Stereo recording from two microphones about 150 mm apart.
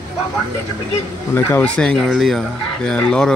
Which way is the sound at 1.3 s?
10° left (ahead or behind).